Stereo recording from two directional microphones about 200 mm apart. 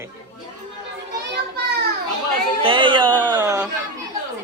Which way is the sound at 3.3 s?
10° right (ahead or behind).